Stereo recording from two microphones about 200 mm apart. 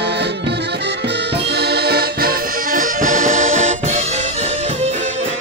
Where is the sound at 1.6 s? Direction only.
55° right (ahead or behind); by 4.0 s 35° right (ahead or behind).